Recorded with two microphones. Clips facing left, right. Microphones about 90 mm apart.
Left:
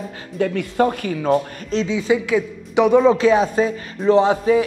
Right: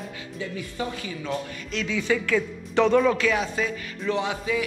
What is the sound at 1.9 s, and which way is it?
A man's voice, 20° left (ahead or behind).